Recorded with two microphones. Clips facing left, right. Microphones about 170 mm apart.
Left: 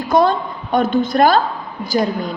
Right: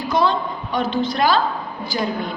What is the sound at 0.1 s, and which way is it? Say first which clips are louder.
A woman's voice: left 5 dB; 50° left (ahead or behind).